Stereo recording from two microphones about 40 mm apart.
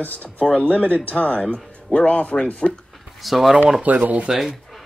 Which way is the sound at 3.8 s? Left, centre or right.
Right.